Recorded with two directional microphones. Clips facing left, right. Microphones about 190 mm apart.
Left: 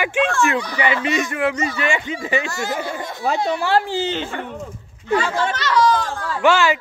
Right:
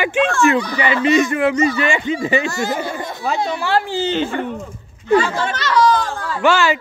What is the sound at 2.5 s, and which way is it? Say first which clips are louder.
Speech: right 3 dB; 20° right (ahead or behind).